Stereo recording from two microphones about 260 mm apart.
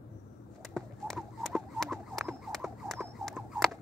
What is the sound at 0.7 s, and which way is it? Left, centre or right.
Horse, centre.